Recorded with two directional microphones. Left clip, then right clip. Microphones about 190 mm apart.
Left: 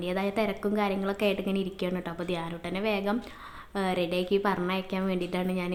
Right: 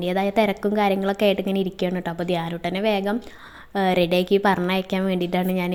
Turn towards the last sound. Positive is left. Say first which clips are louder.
# right 7 dB
turn(degrees=-35)  # may be behind; listen again after turning